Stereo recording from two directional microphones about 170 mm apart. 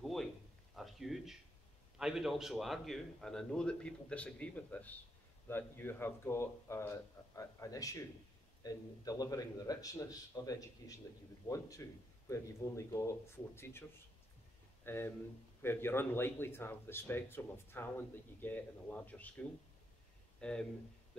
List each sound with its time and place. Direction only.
0.0 s a sound: centre (ahead or behind)
2.0 s a man's voice: 5° right (ahead or behind); by 13.8 s 15° left (ahead or behind)
14.9 s speech: 15° left (ahead or behind)